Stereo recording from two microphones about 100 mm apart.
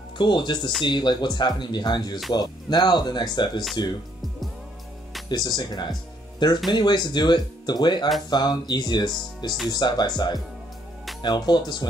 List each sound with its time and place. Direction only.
0.2 s speech: 50° left (ahead or behind)
5.3 s speech: 45° left (ahead or behind)